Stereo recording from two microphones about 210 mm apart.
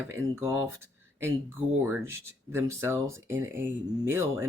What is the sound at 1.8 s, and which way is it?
Speech, 10° right (ahead or behind).